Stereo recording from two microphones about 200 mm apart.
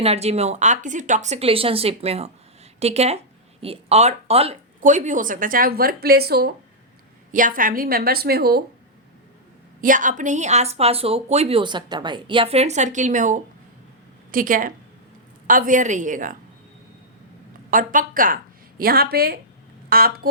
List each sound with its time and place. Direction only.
0.0 s a woman's voice: 30° right (ahead or behind); by 6.5 s 50° right (ahead or behind)
7.3 s speech: 40° right (ahead or behind)
9.8 s a woman's voice: 40° right (ahead or behind)
17.7 s speech: 40° right (ahead or behind)